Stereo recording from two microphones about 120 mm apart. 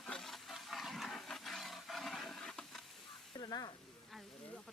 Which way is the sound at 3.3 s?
35° left (ahead or behind).